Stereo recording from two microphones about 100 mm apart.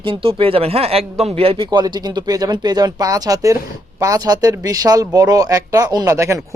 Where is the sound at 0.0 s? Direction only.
65° right (ahead or behind).